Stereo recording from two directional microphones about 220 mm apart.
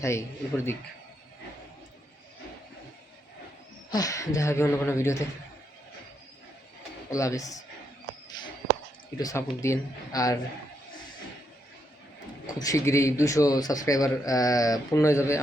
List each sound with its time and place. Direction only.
0.0 s a man's voice: 15° left (ahead or behind)
3.8 s a man's voice: 15° left (ahead or behind)
7.1 s a man's voice: 15° left (ahead or behind)
9.1 s a man's voice: 15° left (ahead or behind)
12.5 s a man's voice: 15° left (ahead or behind)